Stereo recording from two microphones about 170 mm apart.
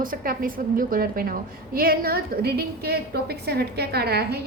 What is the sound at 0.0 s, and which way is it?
A woman's voice, 55° right (ahead or behind).